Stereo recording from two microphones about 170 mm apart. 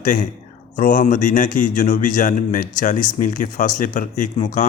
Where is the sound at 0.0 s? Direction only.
50° left (ahead or behind).